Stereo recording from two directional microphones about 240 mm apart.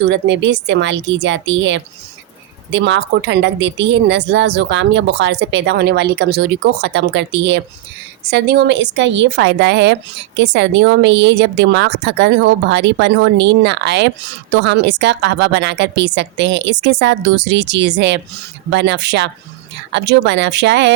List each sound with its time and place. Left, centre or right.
0.1 s a woman's voice: right